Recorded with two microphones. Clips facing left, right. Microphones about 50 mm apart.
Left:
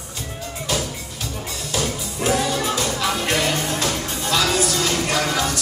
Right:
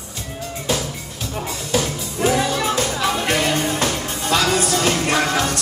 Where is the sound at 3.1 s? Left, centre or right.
Centre.